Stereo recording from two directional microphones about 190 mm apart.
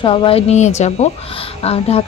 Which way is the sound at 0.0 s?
25° left (ahead or behind).